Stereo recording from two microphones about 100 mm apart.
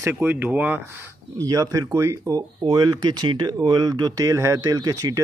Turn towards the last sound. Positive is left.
turn(degrees=-35)  # may be behind; listen again after turning